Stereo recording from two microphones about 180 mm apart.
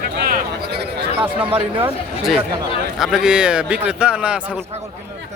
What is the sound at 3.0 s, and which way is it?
Speech, 5° right (ahead or behind).